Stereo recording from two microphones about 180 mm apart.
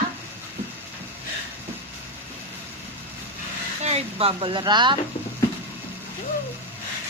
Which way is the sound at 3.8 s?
35° right (ahead or behind).